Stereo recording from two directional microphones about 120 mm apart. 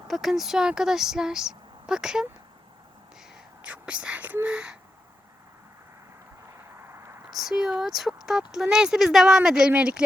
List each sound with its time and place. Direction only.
0.1 s speech: centre (ahead or behind)
3.6 s speech: 10° right (ahead or behind)
6.8 s a sound: 20° right (ahead or behind)
7.3 s speech: 5° right (ahead or behind)